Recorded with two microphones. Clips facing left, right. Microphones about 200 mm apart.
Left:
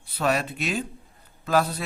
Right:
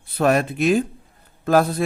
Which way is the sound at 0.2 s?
50° right (ahead or behind).